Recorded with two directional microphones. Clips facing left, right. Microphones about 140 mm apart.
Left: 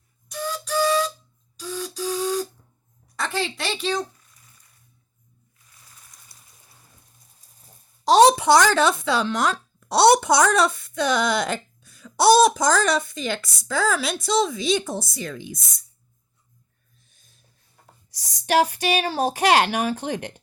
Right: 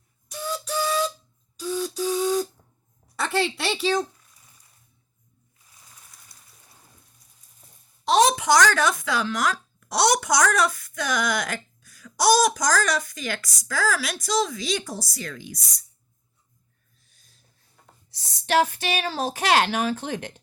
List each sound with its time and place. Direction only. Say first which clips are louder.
0.3 s music: left 2 dB; 10° right (ahead or behind)
1.5 s beatboxing: right 4 dB; 10° right (ahead or behind)
3.2 s a woman's voice: right 2 dB; 10° right (ahead or behind)
8.0 s a sound: left 5 dB; 35° left (ahead or behind)
8.7 s a woman's voice: left 4 dB; 25° left (ahead or behind)
17.2 s a sound: right 2 dB; 20° left (ahead or behind)
18.1 s speech: left 2 dB; 15° left (ahead or behind)
19.4 s speech: left 2 dB; 50° left (ahead or behind)
19.7 s speech: left 1 dB; 10° left (ahead or behind)